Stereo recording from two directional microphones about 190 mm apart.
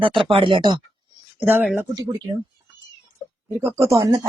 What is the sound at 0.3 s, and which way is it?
Speech, 25° right (ahead or behind).